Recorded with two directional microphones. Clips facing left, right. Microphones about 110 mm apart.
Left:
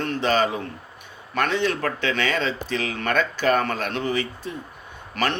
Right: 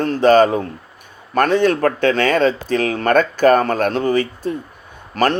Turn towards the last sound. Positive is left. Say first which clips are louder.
# right 8 dB
turn(degrees=-35)  # may be behind; listen again after turning